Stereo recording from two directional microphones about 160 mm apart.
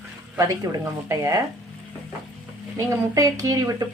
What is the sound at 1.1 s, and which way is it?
Speech, 20° right (ahead or behind).